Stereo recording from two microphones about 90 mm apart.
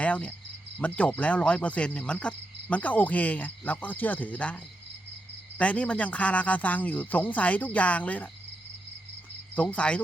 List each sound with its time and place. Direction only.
0.0 s cricket: 15° left (ahead or behind)
9.6 s cricket: 15° left (ahead or behind)